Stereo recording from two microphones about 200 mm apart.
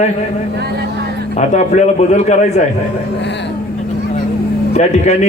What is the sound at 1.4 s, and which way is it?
A man's voice, 35° left (ahead or behind).